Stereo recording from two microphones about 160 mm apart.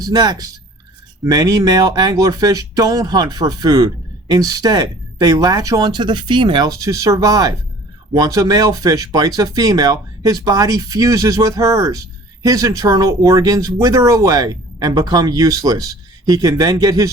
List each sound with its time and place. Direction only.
0.0 s speech: 25° right (ahead or behind)